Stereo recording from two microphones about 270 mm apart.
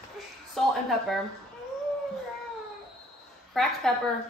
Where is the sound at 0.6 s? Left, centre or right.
Centre.